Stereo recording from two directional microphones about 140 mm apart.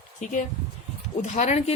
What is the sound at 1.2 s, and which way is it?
Speech, 55° left (ahead or behind).